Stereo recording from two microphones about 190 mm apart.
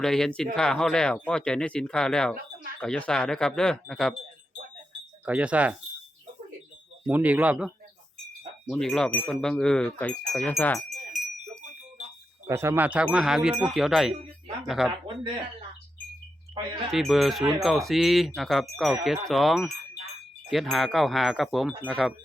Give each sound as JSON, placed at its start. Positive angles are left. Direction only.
{"t": 0.0, "sound": "speech", "side_deg": 5}
{"t": 5.2, "sound": "speech", "side_deg": -5}
{"t": 7.1, "sound": "speech", "side_deg": -10}
{"t": 8.8, "sound": "speech", "side_deg": 5}
{"t": 10.8, "sound": "wind chime", "side_deg": 0}
{"t": 12.5, "sound": "speech", "side_deg": -15}
{"t": 15.0, "sound": "speech", "side_deg": -25}
{"t": 16.9, "sound": "speech", "side_deg": 0}